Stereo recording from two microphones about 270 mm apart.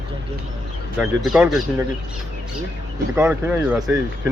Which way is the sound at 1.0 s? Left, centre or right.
Centre.